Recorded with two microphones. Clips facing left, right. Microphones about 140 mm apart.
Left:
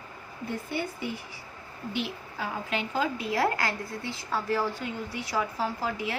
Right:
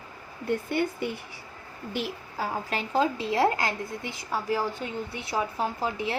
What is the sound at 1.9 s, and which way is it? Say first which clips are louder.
A woman's voice: right 1 dB; 40° right (ahead or behind).